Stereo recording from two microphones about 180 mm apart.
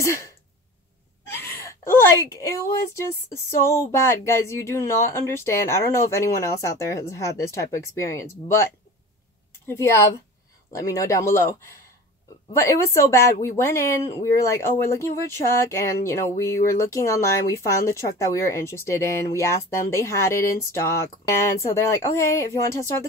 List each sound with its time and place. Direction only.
0.0 s throat clearing: 15° left (ahead or behind)
1.7 s a woman's voice: 15° left (ahead or behind)
10.7 s a woman's voice: 20° left (ahead or behind)
12.5 s a woman's voice: 15° left (ahead or behind)